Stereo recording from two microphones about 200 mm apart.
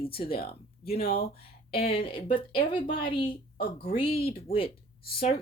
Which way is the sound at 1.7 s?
30° left (ahead or behind).